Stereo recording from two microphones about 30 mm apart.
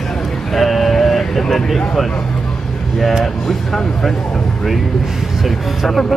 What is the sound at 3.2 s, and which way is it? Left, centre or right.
Speech, centre.